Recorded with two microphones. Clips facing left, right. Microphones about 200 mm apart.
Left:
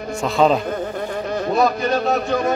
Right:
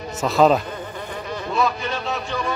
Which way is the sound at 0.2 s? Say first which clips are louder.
Even; centre (ahead or behind).